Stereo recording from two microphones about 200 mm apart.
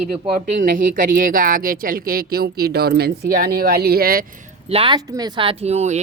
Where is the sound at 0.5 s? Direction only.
45° right (ahead or behind).